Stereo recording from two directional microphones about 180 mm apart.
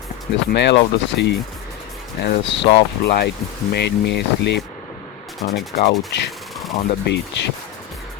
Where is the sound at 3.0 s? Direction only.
65° left (ahead or behind).